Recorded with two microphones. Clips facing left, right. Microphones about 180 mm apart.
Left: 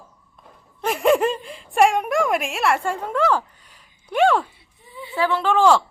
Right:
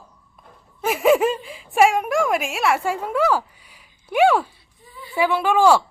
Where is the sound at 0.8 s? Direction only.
5° right (ahead or behind).